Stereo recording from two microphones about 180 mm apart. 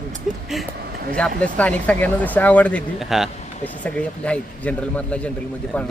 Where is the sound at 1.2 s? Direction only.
10° left (ahead or behind).